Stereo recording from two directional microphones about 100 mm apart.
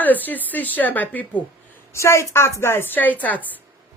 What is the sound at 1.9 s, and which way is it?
A woman's voice, 30° left (ahead or behind).